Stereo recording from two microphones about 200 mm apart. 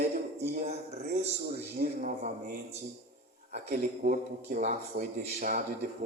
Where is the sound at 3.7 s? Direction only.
50° right (ahead or behind).